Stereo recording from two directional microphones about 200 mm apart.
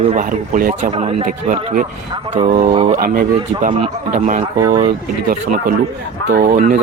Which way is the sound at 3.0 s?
45° right (ahead or behind).